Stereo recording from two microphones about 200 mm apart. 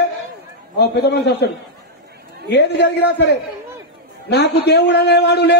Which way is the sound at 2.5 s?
55° left (ahead or behind).